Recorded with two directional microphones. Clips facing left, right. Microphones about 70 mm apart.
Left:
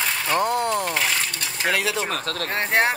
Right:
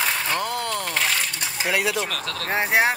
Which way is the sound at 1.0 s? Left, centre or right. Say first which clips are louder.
Even; centre.